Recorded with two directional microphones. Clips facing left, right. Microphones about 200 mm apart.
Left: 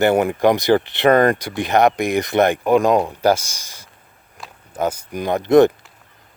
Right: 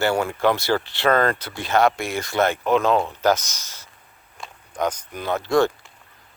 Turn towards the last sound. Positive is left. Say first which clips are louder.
# left 7 dB
turn(degrees=20)  # may be behind; listen again after turning